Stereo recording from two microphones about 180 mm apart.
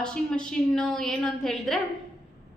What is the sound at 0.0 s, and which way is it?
A woman's voice, 5° left (ahead or behind).